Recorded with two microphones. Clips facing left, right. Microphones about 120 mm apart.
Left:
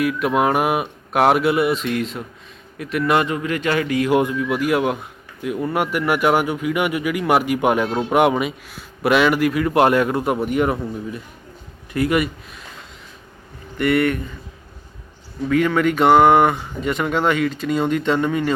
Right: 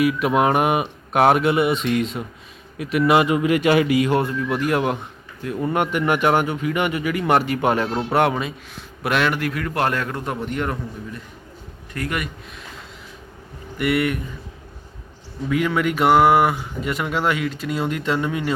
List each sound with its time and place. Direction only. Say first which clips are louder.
0.0 s a man's voice: even; centre (ahead or behind)
4.1 s speech: left 3 dB; 10° left (ahead or behind)
13.7 s speech: left 3 dB; 5° right (ahead or behind)
15.4 s speech: left 3 dB; 5° right (ahead or behind)